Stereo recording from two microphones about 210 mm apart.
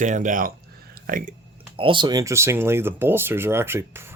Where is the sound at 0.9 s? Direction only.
45° right (ahead or behind).